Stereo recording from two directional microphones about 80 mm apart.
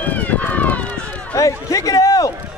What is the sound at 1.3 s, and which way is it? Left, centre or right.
Run, left.